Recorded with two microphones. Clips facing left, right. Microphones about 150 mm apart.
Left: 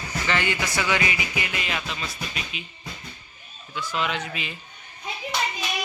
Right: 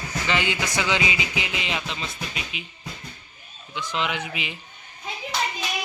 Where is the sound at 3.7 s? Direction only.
20° right (ahead or behind).